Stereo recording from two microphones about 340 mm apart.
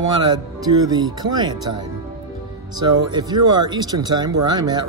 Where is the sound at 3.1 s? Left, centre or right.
Centre.